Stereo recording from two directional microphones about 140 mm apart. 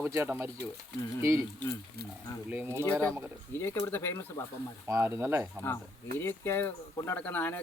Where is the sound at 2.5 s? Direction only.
15° right (ahead or behind).